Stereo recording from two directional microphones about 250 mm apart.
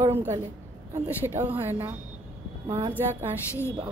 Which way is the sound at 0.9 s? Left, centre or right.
Centre.